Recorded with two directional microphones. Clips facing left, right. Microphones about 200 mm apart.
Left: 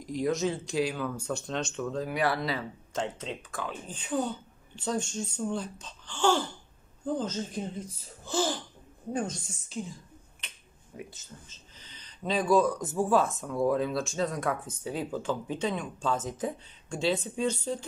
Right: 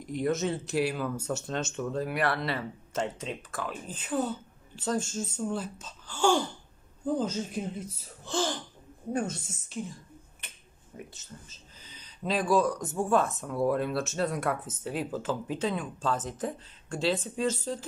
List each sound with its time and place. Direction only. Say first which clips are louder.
0.0 s a woman's voice: even; centre (ahead or behind)
9.1 s speech: right 1 dB; 5° right (ahead or behind)
11.1 s a sound: right 1 dB; 10° right (ahead or behind)
12.2 s speech: left 1 dB; centre (ahead or behind)